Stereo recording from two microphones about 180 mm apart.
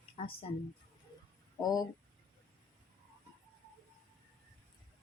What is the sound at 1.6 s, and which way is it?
Speech, 20° left (ahead or behind).